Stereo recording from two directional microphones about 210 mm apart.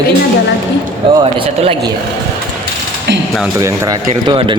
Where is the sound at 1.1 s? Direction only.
25° right (ahead or behind).